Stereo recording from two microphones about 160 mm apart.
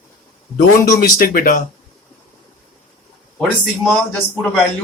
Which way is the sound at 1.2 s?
65° left (ahead or behind).